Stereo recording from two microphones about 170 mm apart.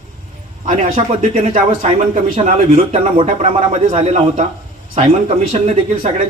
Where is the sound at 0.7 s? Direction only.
50° right (ahead or behind).